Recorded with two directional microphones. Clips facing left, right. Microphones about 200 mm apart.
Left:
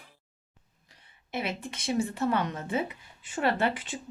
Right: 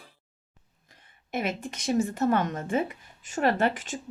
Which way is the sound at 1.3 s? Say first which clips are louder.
Right 3 dB; 45° right (ahead or behind).